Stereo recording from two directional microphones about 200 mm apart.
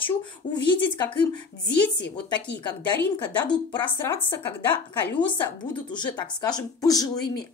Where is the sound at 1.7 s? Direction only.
60° left (ahead or behind).